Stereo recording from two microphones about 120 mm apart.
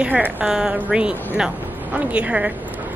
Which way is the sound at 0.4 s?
5° right (ahead or behind).